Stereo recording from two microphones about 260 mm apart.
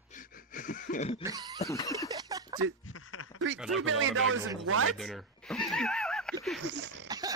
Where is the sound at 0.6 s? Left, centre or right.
Left.